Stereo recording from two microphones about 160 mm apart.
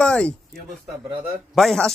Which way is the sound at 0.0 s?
5° left (ahead or behind).